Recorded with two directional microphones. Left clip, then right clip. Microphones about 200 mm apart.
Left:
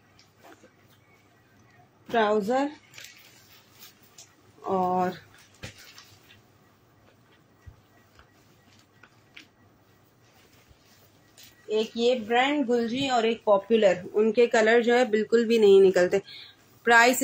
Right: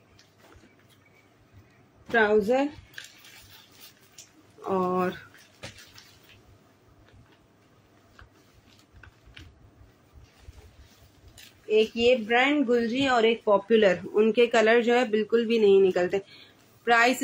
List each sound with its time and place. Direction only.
2.0 s a woman's voice: 20° right (ahead or behind)
4.6 s speech: 20° right (ahead or behind)
11.7 s a woman's voice: 10° right (ahead or behind); by 17.2 s 15° left (ahead or behind)